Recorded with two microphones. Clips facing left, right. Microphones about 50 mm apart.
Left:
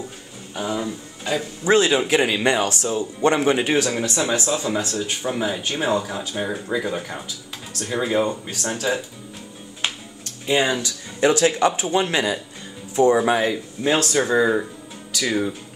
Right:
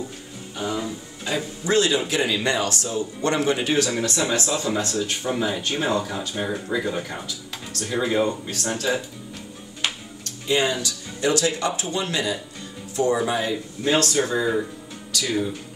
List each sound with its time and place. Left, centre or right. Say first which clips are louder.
0.6 s speech: left 2 dB; centre
1.6 s speech: left 4 dB; left
4.2 s speech: left 3 dB; centre
10.5 s speech: left 2 dB; centre
10.8 s speech: left 5 dB; left
13.8 s speech: left 1 dB; left
15.1 s speech: left 2 dB; left